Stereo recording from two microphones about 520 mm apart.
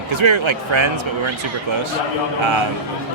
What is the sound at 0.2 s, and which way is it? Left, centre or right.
Speech, right.